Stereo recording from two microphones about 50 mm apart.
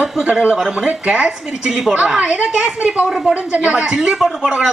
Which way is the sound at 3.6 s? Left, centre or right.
Centre.